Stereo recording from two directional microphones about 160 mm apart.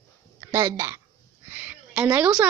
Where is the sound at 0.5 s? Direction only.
20° right (ahead or behind).